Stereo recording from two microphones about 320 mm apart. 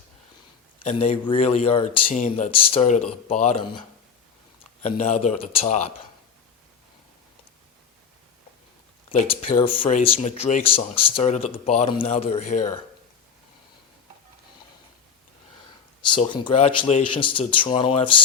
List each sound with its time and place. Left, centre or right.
0.9 s speech: left
9.0 s speech: centre
16.0 s speech: centre